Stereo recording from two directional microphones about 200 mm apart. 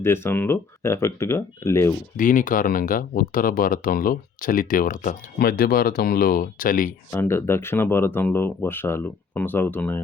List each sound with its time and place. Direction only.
0.0 s speech: 10° left (ahead or behind)
2.1 s speech: 40° left (ahead or behind)
7.1 s speech: 10° left (ahead or behind)